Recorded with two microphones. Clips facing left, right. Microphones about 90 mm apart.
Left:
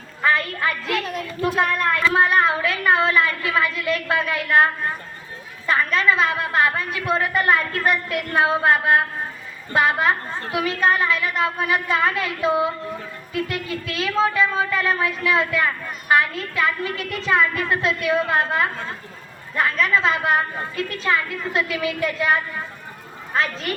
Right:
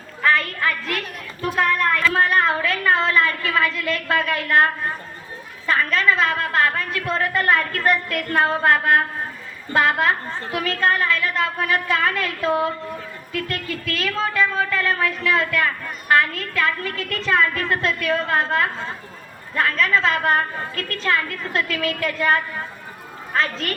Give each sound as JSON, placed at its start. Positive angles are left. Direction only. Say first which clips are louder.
{"t": 0.2, "sound": "music", "louder": "right 1 dB", "side_deg": 15}
{"t": 2.0, "sound": "a woman's voice", "louder": "left 2 dB", "side_deg": 15}
{"t": 23.7, "sound": "a woman's voice", "louder": "left 2 dB", "side_deg": 10}